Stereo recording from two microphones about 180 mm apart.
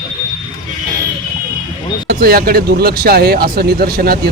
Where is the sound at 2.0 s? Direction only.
55° right (ahead or behind).